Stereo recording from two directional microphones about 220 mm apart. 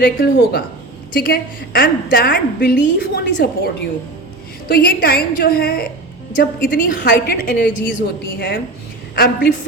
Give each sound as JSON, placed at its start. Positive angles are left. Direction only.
{"t": 0.0, "sound": "a woman's voice", "side_deg": 45}
{"t": 4.7, "sound": "a woman's voice", "side_deg": 40}